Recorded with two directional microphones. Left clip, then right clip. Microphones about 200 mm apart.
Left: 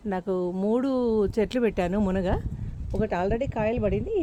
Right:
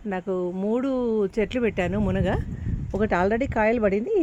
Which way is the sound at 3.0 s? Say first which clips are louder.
Right 4 dB; 25° right (ahead or behind).